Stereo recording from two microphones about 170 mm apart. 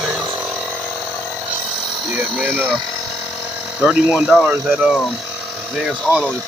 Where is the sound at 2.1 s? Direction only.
10° right (ahead or behind).